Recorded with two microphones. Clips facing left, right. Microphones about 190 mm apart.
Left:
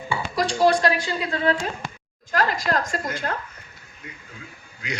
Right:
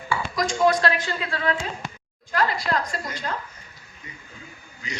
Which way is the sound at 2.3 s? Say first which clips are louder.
Left 1 dB; 45° left (ahead or behind).